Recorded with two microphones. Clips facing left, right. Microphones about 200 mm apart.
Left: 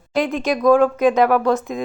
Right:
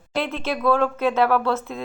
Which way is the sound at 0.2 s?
15° left (ahead or behind).